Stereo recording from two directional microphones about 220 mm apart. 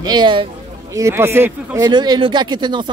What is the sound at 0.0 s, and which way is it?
A man's voice, 20° right (ahead or behind).